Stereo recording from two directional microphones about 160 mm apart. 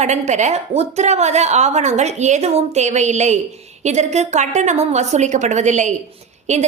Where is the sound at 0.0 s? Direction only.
45° right (ahead or behind).